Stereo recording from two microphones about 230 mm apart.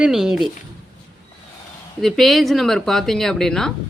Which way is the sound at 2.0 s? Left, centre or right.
Centre.